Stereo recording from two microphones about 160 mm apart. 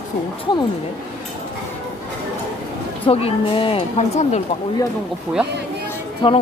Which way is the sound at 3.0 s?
40° left (ahead or behind).